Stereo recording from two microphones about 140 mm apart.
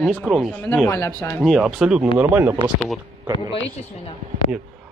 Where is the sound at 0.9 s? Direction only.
20° left (ahead or behind).